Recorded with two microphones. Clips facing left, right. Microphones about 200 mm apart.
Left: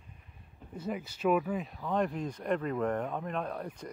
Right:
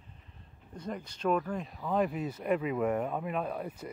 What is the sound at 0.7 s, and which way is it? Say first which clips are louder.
Speech: left 2 dB; 5° left (ahead or behind).